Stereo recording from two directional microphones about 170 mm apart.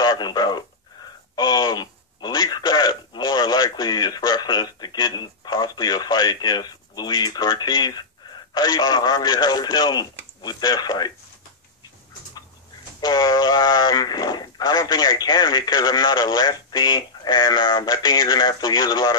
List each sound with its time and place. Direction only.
0.0 s a sound: 25° left (ahead or behind)
8.5 s a man's voice: 25° left (ahead or behind)
13.0 s speech: 25° left (ahead or behind)